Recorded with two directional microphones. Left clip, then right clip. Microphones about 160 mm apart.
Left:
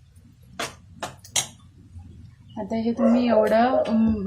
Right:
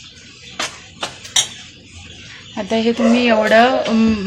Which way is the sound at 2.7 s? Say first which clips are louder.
Right 7 dB; 10° right (ahead or behind).